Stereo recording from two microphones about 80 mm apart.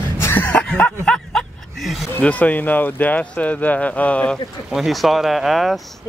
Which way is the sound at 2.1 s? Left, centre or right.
Centre.